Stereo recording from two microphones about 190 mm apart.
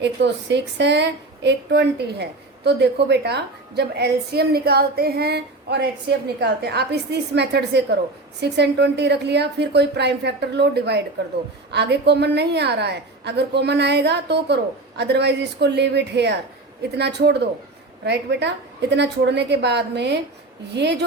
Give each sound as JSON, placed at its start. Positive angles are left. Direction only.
{"t": 0.0, "sound": "a woman's voice", "side_deg": -65}